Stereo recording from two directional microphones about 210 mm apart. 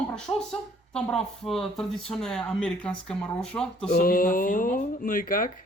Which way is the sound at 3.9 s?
45° left (ahead or behind).